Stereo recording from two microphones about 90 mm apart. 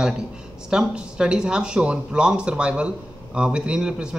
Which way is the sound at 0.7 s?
10° right (ahead or behind).